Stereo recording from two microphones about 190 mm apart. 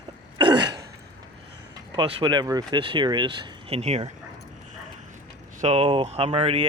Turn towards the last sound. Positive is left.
turn(degrees=-30)  # may be behind; listen again after turning